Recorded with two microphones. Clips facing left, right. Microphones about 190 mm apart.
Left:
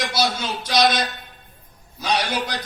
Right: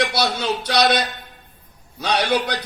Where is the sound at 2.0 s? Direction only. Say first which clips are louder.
Right 3 dB; 65° right (ahead or behind).